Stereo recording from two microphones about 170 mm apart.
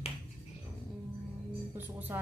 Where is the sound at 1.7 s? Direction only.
10° right (ahead or behind).